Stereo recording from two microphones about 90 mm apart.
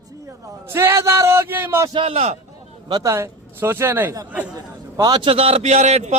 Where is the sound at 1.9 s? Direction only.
70° right (ahead or behind).